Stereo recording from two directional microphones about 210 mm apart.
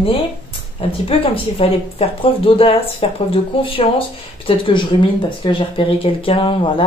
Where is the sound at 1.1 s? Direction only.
25° left (ahead or behind).